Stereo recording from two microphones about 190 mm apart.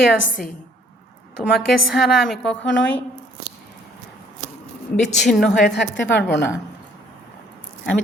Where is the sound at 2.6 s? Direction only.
70° left (ahead or behind).